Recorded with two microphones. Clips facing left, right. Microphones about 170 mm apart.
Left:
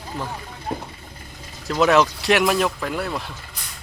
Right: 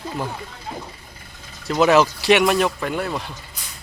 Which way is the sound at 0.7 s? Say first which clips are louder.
Left 4 dB; 50° left (ahead or behind).